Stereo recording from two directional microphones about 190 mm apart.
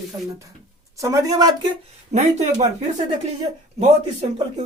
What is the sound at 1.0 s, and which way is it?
Speech, 15° right (ahead or behind).